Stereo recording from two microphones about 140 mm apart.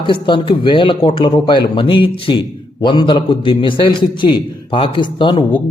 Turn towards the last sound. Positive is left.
turn(degrees=35)  # may be behind; listen again after turning